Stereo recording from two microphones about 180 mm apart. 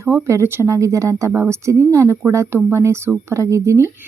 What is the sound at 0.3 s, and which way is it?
Speech, 15° right (ahead or behind).